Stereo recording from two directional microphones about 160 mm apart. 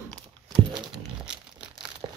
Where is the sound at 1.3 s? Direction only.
5° right (ahead or behind).